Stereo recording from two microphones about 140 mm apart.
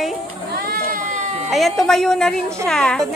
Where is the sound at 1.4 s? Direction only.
Centre (ahead or behind).